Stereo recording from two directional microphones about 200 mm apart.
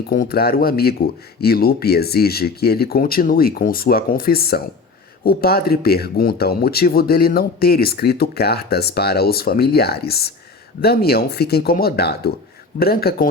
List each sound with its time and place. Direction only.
0.1 s speech: 45° left (ahead or behind)